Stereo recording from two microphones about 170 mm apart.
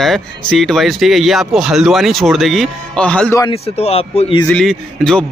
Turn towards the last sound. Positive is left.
turn(degrees=5)  # may be behind; listen again after turning